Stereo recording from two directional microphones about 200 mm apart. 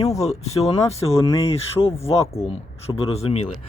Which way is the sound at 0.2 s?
30° left (ahead or behind).